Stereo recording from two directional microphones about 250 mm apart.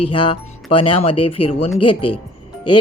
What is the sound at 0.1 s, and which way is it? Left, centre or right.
Speech, centre.